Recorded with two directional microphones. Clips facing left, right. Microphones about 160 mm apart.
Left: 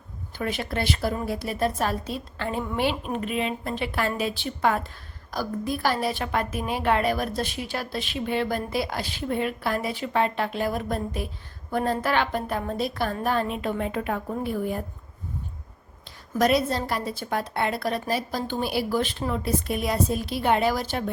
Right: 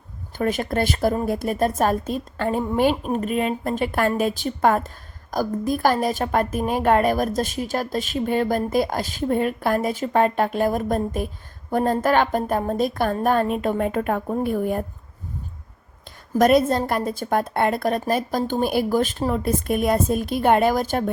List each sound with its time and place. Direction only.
0.3 s a woman's voice: 45° right (ahead or behind)
16.3 s a woman's voice: 50° right (ahead or behind)